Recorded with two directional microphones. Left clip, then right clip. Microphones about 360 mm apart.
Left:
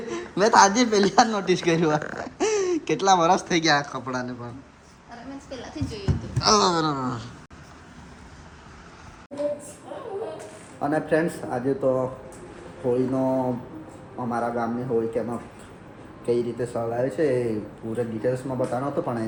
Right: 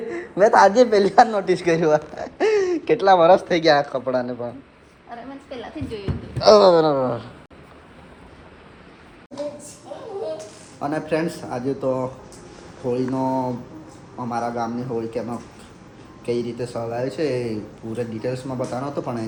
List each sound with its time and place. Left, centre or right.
0.1 s speech: centre
5.5 s speech: centre
6.4 s speech: centre
10.8 s speech: centre